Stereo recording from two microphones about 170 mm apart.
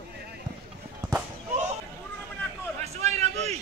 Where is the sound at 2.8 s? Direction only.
40° right (ahead or behind).